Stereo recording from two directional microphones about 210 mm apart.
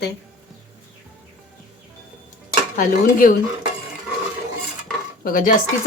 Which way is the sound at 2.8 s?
40° left (ahead or behind).